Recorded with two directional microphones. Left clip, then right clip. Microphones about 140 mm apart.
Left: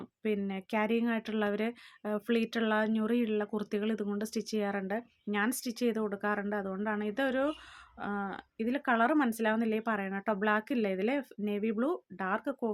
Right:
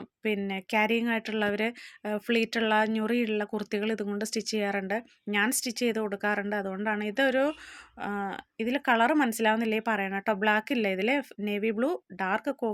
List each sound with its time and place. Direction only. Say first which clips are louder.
0.2 s speech: right 4 dB; 15° right (ahead or behind)